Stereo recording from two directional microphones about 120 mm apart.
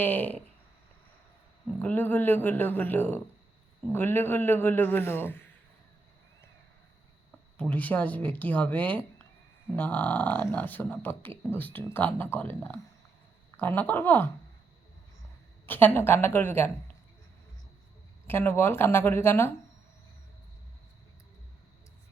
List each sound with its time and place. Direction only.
0.0 s speech: 15° left (ahead or behind)
1.8 s speech: 10° left (ahead or behind)
7.5 s speech: 10° left (ahead or behind)
15.6 s speech: 15° left (ahead or behind)
18.3 s speech: 20° left (ahead or behind)